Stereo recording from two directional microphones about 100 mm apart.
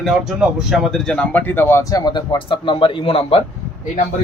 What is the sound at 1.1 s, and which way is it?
Speech, 10° left (ahead or behind).